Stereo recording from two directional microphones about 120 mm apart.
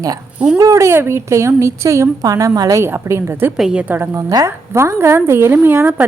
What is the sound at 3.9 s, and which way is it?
A woman's voice, 25° right (ahead or behind).